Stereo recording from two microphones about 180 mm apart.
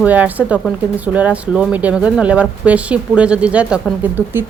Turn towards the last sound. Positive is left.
turn(degrees=-10)  # may be behind; listen again after turning